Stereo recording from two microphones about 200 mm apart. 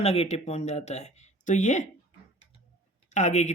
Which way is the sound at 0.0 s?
30° left (ahead or behind).